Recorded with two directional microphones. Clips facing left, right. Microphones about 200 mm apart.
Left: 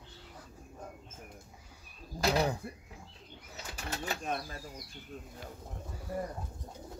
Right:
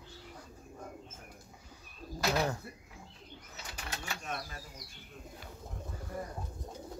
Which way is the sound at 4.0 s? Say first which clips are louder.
Left 6 dB; 35° left (ahead or behind).